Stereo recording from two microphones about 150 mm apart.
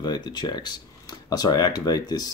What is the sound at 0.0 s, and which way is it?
Speech, 30° left (ahead or behind).